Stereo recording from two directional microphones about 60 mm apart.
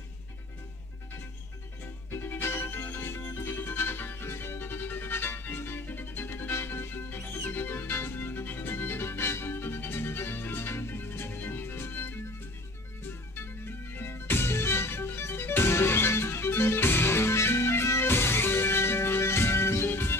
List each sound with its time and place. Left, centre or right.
2.0 s music: left
13.4 s music: left